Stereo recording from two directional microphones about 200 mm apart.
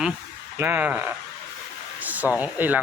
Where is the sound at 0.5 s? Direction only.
10° right (ahead or behind).